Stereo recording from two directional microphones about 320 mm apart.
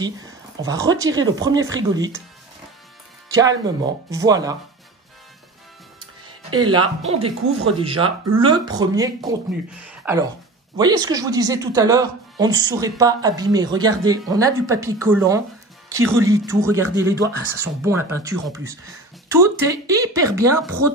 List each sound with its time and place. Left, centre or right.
0.0 s speech: centre
3.3 s speech: centre
6.5 s speech: centre